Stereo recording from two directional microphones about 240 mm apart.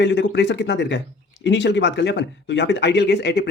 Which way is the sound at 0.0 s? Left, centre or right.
Left.